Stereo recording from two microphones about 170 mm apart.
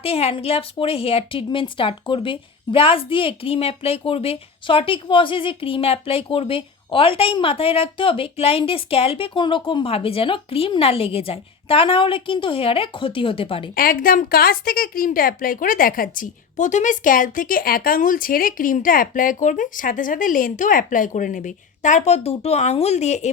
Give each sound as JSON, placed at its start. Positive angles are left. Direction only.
{"t": 0.0, "sound": "speech", "side_deg": 35}
{"t": 13.7, "sound": "a woman's voice", "side_deg": 55}